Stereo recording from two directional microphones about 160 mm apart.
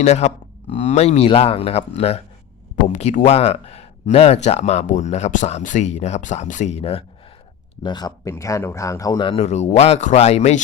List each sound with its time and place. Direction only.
0.0 s speech: 45° left (ahead or behind)
7.8 s speech: 25° left (ahead or behind); by 10.6 s 45° left (ahead or behind)